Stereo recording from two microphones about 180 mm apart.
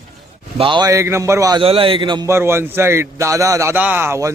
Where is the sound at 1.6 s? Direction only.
30° right (ahead or behind); by 4.3 s 15° right (ahead or behind).